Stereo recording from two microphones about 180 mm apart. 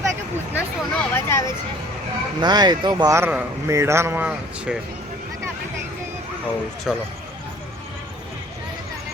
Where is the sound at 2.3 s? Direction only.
25° right (ahead or behind).